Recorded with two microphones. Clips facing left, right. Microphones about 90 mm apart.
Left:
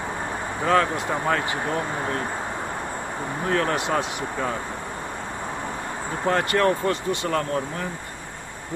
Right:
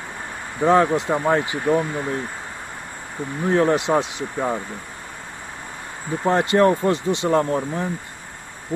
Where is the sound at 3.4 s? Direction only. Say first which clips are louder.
Right 6 dB; 20° right (ahead or behind).